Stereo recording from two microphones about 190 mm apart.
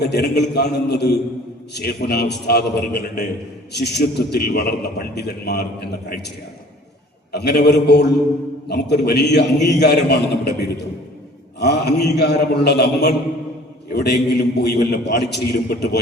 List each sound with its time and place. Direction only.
0.0 s a man's voice: 60° left (ahead or behind)
7.3 s a man's voice: 60° left (ahead or behind)